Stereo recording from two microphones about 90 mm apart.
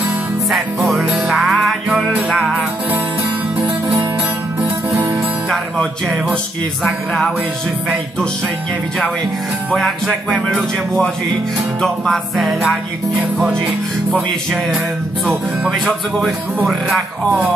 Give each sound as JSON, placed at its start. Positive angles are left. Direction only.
{"t": 0.5, "sound": "music", "side_deg": 0}
{"t": 3.6, "sound": "music", "side_deg": -30}
{"t": 6.8, "sound": "a man's voice", "side_deg": 0}
{"t": 9.8, "sound": "a man's voice", "side_deg": 0}
{"t": 11.8, "sound": "a man's voice", "side_deg": 0}
{"t": 15.7, "sound": "a man's voice", "side_deg": 0}